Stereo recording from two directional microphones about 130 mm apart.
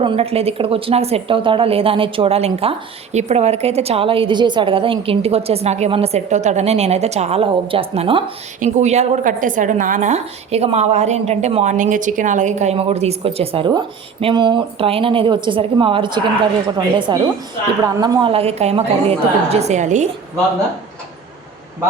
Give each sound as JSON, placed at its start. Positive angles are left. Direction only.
{"t": 0.0, "sound": "speech", "side_deg": -45}
{"t": 8.6, "sound": "a woman's voice", "side_deg": -60}